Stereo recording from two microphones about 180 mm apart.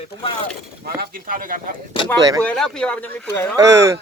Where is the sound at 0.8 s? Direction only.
50° right (ahead or behind).